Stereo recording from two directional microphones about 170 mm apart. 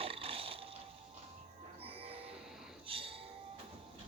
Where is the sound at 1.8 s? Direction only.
35° right (ahead or behind).